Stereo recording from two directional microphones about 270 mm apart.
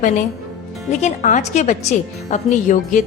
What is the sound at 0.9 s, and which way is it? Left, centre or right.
A woman's voice, left.